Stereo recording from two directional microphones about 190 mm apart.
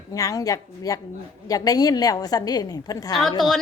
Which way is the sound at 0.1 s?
15° left (ahead or behind).